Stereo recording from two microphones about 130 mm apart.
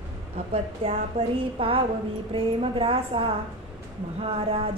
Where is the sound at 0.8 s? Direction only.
45° right (ahead or behind).